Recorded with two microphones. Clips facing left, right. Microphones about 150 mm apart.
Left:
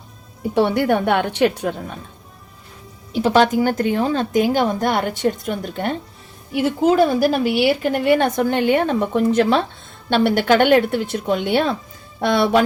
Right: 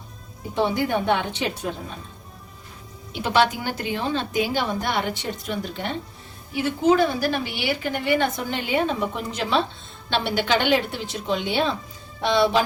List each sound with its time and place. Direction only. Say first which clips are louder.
0.5 s a woman's voice: left 5 dB; 65° left (ahead or behind)
3.1 s a woman's voice: left 5 dB; 40° left (ahead or behind)
6.5 s a woman's voice: left 4 dB; 60° left (ahead or behind)
7.4 s a woman's voice: left 9 dB; 70° left (ahead or behind)